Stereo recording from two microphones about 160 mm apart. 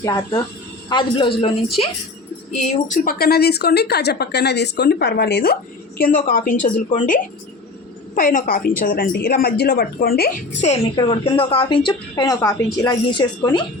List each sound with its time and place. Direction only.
0.0 s a woman's voice: 25° left (ahead or behind)
2.6 s a woman's voice: 50° left (ahead or behind); by 5.5 s 80° left
6.0 s a woman's voice: 60° left (ahead or behind)
10.9 s a woman's voice: 30° left (ahead or behind)